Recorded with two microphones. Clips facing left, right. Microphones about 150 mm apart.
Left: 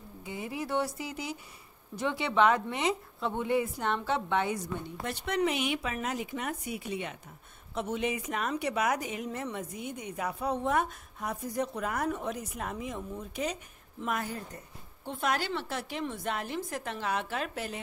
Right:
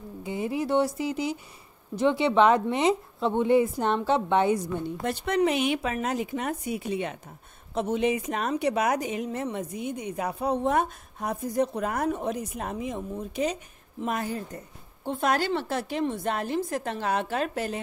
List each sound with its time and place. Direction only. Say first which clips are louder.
0.2 s a woman's voice: right 8 dB; 25° right (ahead or behind)
10.2 s a woman's voice: right 4 dB; 30° right (ahead or behind)
15.0 s a woman's voice: right 6 dB; 40° right (ahead or behind)